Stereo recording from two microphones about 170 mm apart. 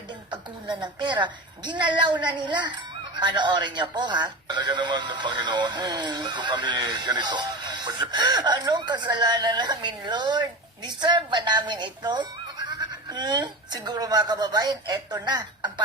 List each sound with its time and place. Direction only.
0.3 s speech: 25° right (ahead or behind)